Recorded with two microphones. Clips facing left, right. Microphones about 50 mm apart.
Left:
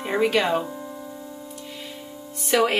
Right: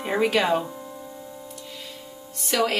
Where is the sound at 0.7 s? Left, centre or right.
Centre.